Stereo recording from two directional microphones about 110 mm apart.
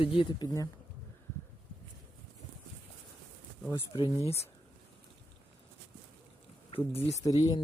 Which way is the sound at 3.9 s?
45° left (ahead or behind).